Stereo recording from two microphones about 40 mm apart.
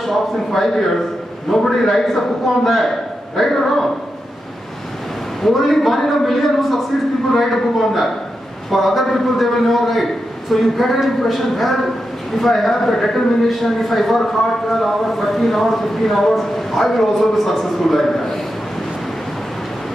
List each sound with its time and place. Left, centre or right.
0.0 s a man's voice: centre
5.4 s speech: centre